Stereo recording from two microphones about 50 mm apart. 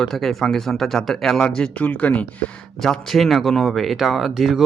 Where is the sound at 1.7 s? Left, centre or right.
Left.